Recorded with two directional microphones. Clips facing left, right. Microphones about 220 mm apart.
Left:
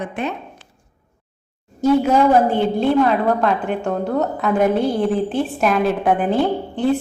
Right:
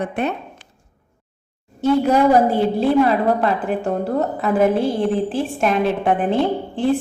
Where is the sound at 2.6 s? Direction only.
5° right (ahead or behind).